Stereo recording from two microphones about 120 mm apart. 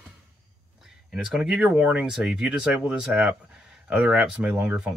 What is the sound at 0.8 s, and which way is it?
Speech, 5° right (ahead or behind).